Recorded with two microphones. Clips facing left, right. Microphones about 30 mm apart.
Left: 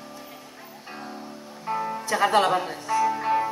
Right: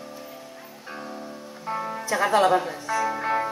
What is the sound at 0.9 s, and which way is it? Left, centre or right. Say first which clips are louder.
Music: right 2 dB; centre.